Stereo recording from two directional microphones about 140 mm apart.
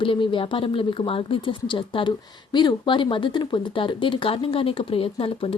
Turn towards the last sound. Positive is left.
turn(degrees=40)  # may be behind; listen again after turning